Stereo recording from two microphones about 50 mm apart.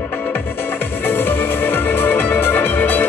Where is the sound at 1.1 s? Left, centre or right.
Left.